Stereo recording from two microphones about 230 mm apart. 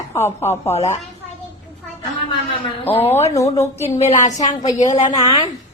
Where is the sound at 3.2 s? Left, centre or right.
Centre.